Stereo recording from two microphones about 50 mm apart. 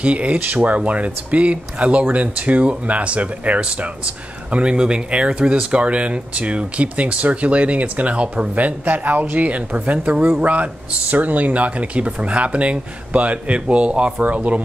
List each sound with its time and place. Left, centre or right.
0.0 s speech: right
10.4 s speech: right